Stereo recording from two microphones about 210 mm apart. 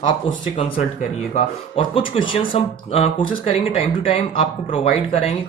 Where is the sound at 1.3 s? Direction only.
25° left (ahead or behind).